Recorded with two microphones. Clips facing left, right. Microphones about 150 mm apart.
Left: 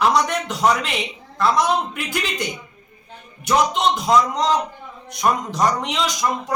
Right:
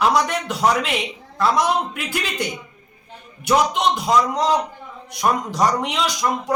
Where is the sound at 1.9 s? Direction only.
5° right (ahead or behind).